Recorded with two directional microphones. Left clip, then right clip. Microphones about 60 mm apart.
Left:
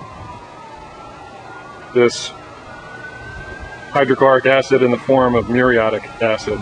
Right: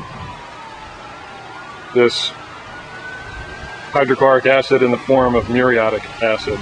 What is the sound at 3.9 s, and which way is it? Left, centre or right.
Speech, centre.